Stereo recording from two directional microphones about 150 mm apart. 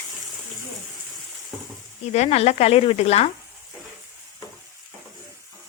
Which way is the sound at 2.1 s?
45° left (ahead or behind).